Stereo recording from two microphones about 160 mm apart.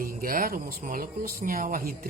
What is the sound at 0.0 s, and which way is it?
Speech, 60° right (ahead or behind).